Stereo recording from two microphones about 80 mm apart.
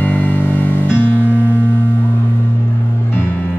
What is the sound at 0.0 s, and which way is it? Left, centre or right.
Music, centre.